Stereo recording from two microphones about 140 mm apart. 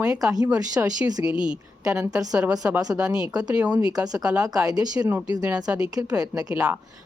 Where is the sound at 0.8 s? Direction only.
15° right (ahead or behind).